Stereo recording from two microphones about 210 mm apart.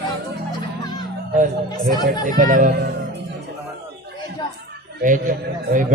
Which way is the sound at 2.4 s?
40° right (ahead or behind).